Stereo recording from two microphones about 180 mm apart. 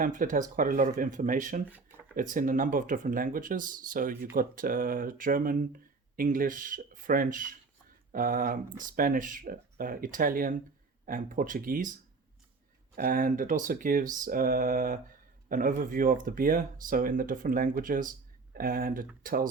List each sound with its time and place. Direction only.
0.0 s speech: 50° right (ahead or behind)
13.0 s speech: 50° right (ahead or behind)